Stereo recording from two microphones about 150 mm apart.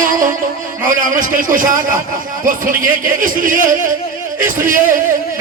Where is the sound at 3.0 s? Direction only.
65° right (ahead or behind).